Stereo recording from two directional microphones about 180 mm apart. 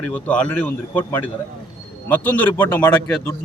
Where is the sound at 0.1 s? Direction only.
5° left (ahead or behind).